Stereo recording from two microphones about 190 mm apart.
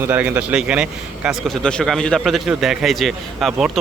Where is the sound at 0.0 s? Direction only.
10° right (ahead or behind).